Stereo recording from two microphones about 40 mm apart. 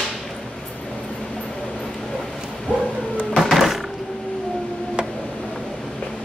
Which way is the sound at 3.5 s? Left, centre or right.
Centre.